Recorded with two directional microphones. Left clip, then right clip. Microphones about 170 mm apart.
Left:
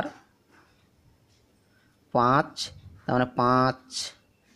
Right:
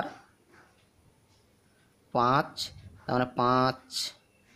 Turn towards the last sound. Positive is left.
turn(degrees=20)  # may be behind; listen again after turning